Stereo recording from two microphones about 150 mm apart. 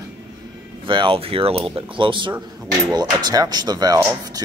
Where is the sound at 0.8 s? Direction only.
35° right (ahead or behind).